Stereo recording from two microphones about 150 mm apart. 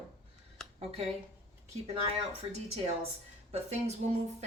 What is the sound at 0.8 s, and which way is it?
Speech, 45° right (ahead or behind).